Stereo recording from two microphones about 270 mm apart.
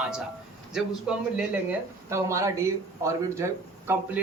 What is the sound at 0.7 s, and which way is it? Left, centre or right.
A man's voice, centre.